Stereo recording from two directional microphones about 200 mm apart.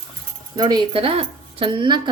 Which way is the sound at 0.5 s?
20° right (ahead or behind).